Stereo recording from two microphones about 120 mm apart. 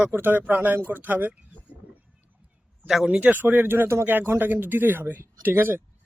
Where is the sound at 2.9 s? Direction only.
5° right (ahead or behind).